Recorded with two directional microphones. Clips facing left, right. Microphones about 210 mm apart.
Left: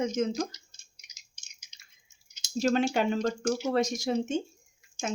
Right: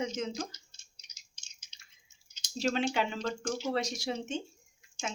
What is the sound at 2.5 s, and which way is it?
Speech, 45° left (ahead or behind).